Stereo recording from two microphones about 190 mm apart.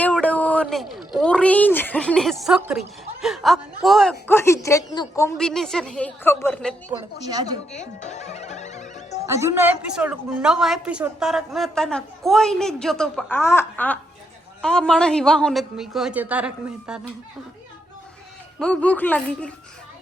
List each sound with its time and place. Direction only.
0.0 s a sound: 5° left (ahead or behind)
2.6 s a woman's voice: 5° right (ahead or behind)
4.3 s a woman's voice: 15° left (ahead or behind)
5.4 s a woman's voice: centre (ahead or behind)
7.3 s a woman's voice: 20° right (ahead or behind)
7.7 s music: 35° left (ahead or behind)
9.3 s a woman's voice: 15° right (ahead or behind)
18.6 s a woman's voice: 5° left (ahead or behind)